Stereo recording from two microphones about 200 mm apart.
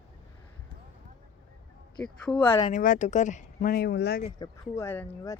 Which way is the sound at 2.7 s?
40° left (ahead or behind).